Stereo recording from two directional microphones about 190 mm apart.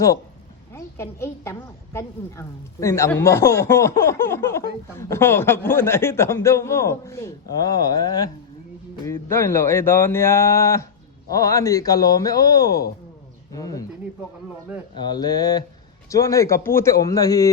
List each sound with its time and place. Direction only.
0.7 s a woman's voice: 15° left (ahead or behind)
9.3 s a woman's voice: 15° left (ahead or behind)
14.9 s a woman's voice: 20° left (ahead or behind)